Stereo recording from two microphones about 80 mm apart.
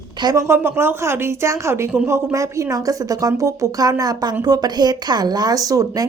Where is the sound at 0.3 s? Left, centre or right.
Right.